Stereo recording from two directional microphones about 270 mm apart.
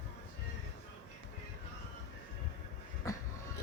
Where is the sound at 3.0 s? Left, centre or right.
Centre.